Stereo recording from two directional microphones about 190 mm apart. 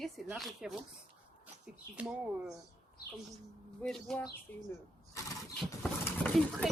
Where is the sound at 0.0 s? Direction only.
Centre (ahead or behind).